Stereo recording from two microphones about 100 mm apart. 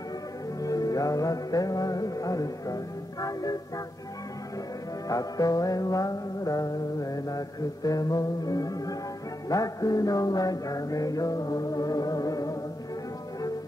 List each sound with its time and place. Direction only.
0.6 s music: 35° left (ahead or behind)
5.0 s music: 35° left (ahead or behind)